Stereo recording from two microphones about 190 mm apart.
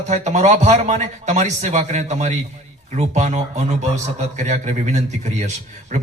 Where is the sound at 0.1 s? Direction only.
40° right (ahead or behind).